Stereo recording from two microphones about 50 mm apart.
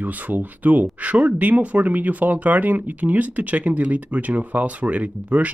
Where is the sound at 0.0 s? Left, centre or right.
Right.